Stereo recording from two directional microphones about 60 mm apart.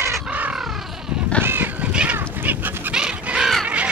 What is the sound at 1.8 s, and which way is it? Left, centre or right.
Crow, right.